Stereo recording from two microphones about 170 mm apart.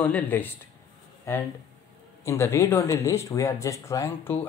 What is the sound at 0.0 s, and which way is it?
Speech, 10° left (ahead or behind).